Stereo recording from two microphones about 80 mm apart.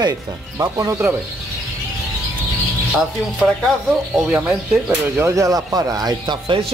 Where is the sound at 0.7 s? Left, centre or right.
Right.